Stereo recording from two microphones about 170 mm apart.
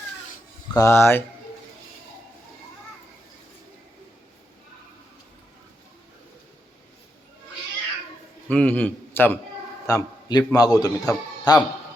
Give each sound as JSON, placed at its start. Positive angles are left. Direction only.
{"t": 0.7, "sound": "speech", "side_deg": 15}
{"t": 8.4, "sound": "a man's voice", "side_deg": 10}